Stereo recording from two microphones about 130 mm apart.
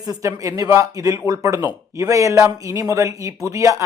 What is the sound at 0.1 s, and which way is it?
Speech, 25° right (ahead or behind).